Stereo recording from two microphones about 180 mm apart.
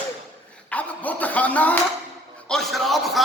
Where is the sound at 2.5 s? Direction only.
Centre (ahead or behind).